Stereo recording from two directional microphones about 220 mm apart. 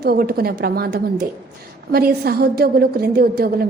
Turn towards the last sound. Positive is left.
turn(degrees=-45)  # may be behind; listen again after turning